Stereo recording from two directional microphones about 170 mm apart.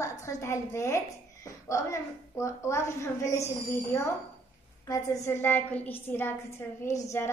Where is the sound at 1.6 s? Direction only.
15° left (ahead or behind).